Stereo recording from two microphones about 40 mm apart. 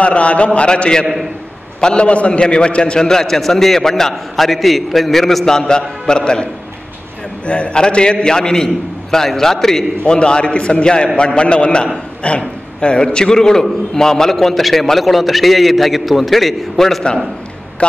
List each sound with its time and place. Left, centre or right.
0.0 s a man's voice: left; by 9.8 s centre
10.0 s a man's voice: left; by 17.0 s centre